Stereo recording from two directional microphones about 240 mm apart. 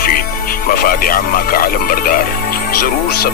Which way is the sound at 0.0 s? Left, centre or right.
Left.